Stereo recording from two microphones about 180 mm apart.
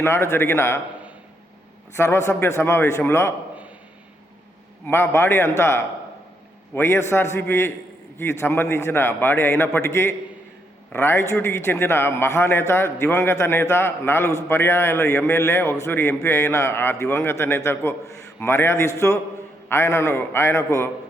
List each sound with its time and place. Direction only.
0.0 s a man's voice: 15° left (ahead or behind)
2.0 s a man's voice: 15° left (ahead or behind)
4.9 s a man's voice: 10° left (ahead or behind)